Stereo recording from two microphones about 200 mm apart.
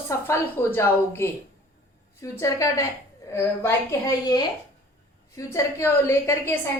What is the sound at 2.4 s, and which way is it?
A woman's voice, 15° left (ahead or behind).